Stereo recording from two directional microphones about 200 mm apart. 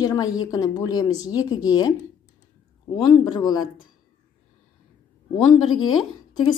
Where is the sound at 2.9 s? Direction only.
20° left (ahead or behind).